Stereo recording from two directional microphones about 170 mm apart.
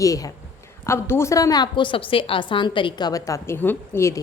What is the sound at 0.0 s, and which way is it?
A woman's voice, 20° left (ahead or behind).